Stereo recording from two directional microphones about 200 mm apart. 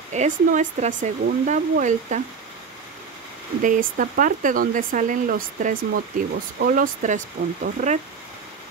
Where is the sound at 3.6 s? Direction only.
40° right (ahead or behind).